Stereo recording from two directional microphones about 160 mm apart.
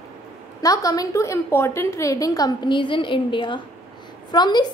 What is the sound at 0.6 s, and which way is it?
A woman's voice, 20° left (ahead or behind).